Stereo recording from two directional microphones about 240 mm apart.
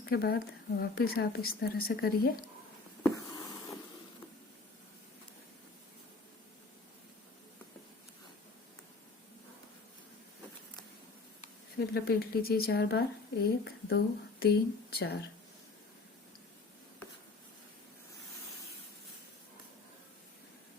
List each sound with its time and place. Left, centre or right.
0.0 s a woman's voice: left
3.0 s a sound: centre
11.9 s a woman's voice: left